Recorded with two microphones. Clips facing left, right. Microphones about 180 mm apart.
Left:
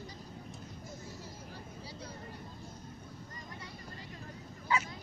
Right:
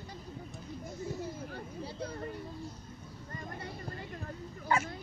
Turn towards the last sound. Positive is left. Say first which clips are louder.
# right 3 dB
turn(degrees=-50)  # may be behind; listen again after turning